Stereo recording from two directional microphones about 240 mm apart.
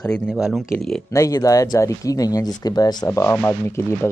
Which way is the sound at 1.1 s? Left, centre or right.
Centre.